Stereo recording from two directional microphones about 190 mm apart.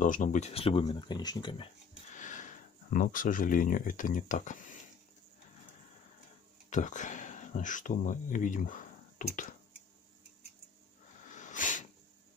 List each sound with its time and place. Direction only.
0.0 s speech: 45° left (ahead or behind); by 1.7 s 25° left (ahead or behind)
2.1 s speech: 40° left (ahead or behind)
6.7 s speech: 40° left (ahead or behind)
11.2 s a sound: 40° left (ahead or behind)